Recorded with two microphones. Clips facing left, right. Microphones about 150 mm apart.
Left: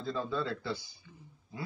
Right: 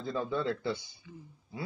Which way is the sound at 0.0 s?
20° right (ahead or behind).